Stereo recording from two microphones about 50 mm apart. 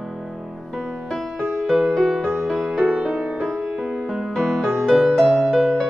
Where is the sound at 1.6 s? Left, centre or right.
Centre.